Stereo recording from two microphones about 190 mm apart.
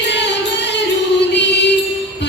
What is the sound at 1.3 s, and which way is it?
Music, 65° left (ahead or behind).